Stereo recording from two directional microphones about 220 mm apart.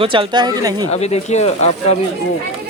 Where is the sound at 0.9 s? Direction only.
30° left (ahead or behind).